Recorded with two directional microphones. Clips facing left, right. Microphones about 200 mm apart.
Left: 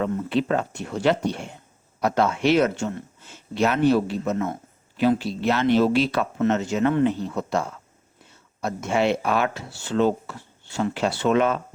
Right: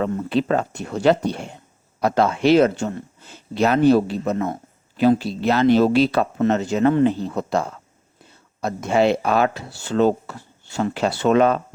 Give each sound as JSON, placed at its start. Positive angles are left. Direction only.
{"t": 0.0, "sound": "speech", "side_deg": -35}